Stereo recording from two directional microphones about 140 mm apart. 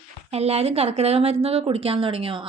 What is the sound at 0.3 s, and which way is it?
Speech, 45° right (ahead or behind).